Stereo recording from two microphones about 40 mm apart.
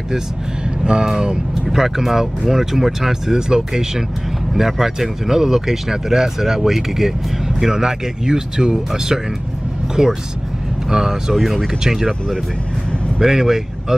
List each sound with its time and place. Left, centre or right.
1.0 s speech: centre
13.2 s speech: centre